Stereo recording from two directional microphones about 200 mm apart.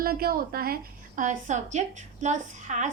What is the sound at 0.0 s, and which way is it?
A woman's voice, 50° right (ahead or behind).